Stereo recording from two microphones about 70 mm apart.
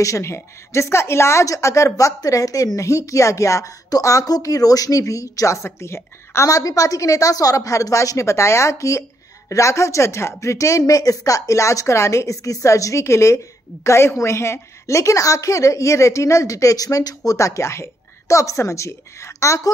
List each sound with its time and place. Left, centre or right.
0.0 s speech: left